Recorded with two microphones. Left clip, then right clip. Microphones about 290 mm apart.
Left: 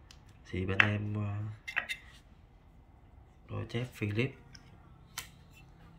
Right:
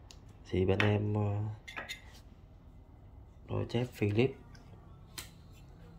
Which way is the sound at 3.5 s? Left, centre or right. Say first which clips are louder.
Right 4 dB; centre.